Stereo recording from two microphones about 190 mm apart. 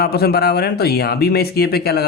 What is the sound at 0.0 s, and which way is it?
Speech, 55° left (ahead or behind).